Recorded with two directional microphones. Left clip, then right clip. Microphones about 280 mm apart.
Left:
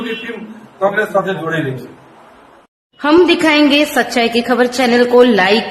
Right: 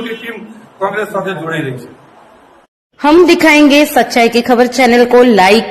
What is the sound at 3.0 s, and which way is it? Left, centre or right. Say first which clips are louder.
A woman's voice: right 4 dB; centre.